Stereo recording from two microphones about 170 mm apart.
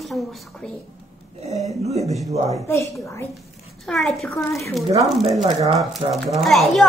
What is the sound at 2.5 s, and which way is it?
Speech, 15° left (ahead or behind).